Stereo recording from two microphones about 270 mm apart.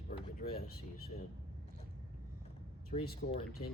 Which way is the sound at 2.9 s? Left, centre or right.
Left.